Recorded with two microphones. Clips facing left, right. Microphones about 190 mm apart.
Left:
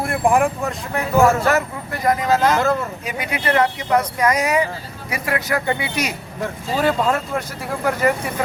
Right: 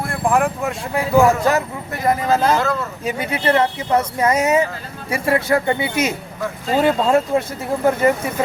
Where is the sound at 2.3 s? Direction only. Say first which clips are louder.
Left 2 dB; 30° right (ahead or behind).